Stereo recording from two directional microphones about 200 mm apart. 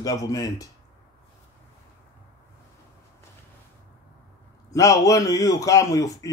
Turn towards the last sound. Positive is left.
turn(degrees=15)  # may be behind; listen again after turning